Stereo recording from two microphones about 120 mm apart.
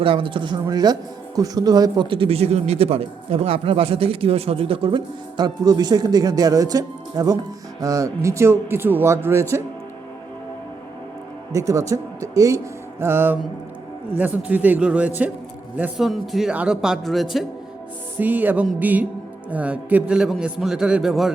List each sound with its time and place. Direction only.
0.0 s speech: 45° right (ahead or behind); by 9.6 s 20° right (ahead or behind)
11.5 s a man's voice: 25° right (ahead or behind)
16.0 s speech: centre (ahead or behind)
18.2 s a man's voice: 15° right (ahead or behind)